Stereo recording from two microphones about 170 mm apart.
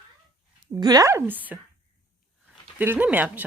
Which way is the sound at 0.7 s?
20° right (ahead or behind).